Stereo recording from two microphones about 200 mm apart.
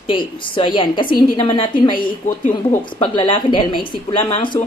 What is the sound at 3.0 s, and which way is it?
A woman's voice, 25° left (ahead or behind).